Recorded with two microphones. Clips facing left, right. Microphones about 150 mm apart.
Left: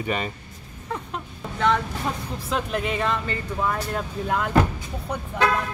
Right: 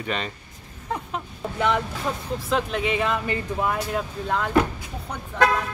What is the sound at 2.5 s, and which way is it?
Speech, centre (ahead or behind).